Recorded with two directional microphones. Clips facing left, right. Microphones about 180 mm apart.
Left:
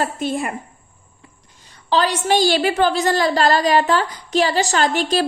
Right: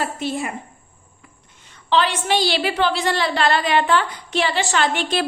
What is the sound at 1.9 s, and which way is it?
A woman's voice, 40° left (ahead or behind).